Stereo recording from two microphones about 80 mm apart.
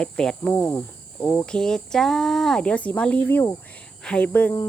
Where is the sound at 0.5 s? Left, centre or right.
Left.